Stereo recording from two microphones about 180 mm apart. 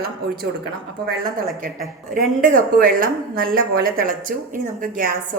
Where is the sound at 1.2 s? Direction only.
50° right (ahead or behind).